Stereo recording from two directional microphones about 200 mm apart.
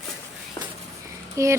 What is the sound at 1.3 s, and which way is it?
Speech, 15° right (ahead or behind).